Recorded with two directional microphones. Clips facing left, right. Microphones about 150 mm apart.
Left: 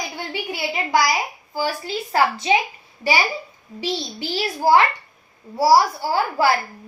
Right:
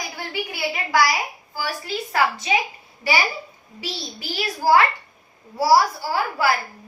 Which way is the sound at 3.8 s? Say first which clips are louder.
Left 6 dB; 25° left (ahead or behind).